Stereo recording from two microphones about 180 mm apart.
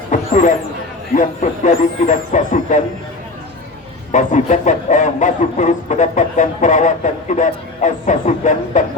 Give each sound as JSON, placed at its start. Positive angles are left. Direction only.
{"t": 0.1, "sound": "a sound", "side_deg": 40}
{"t": 1.1, "sound": "speech", "side_deg": 45}
{"t": 4.1, "sound": "speech", "side_deg": 40}